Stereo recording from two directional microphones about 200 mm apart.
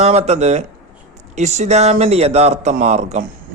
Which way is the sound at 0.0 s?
35° right (ahead or behind).